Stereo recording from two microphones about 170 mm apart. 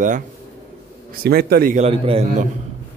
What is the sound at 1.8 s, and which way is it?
Speech, 35° right (ahead or behind).